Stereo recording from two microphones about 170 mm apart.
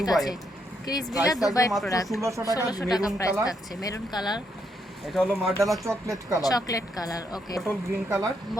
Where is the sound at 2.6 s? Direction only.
25° left (ahead or behind).